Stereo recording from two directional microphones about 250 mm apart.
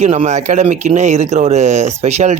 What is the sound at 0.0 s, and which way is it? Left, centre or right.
Speech, right.